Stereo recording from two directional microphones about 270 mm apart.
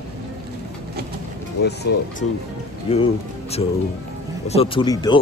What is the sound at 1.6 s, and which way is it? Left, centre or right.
Speech, left.